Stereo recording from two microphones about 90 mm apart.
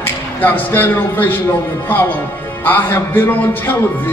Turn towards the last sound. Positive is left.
turn(degrees=25)  # may be behind; listen again after turning